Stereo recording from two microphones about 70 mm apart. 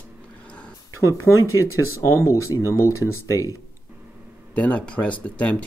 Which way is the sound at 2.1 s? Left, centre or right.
Left.